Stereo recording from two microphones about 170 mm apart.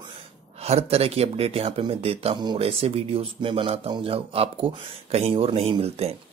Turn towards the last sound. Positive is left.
turn(degrees=-35)  # may be behind; listen again after turning